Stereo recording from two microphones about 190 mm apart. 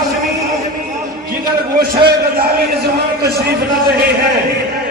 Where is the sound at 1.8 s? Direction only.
55° right (ahead or behind).